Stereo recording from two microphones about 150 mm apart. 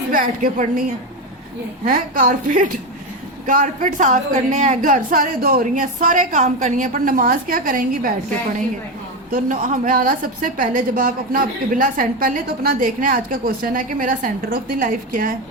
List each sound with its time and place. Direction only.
0.1 s a woman's voice: 65° right (ahead or behind)
1.8 s a woman's voice: 70° right (ahead or behind)
9.3 s a woman's voice: 60° right (ahead or behind)